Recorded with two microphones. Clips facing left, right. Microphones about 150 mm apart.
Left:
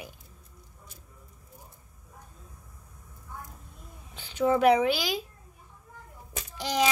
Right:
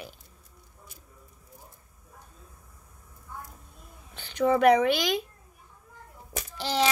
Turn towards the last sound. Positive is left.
turn(degrees=15)  # may be behind; listen again after turning